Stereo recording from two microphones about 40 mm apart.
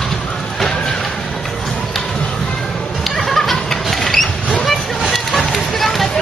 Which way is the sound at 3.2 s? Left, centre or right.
Centre.